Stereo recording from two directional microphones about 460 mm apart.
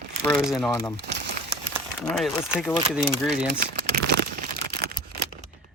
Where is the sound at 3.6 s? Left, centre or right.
Centre.